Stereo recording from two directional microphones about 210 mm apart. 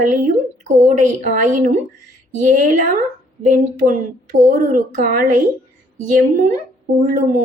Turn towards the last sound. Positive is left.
turn(degrees=-40)  # may be behind; listen again after turning